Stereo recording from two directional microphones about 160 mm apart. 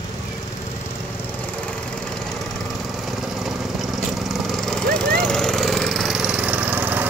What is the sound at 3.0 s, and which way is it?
Lawn mower, centre (ahead or behind).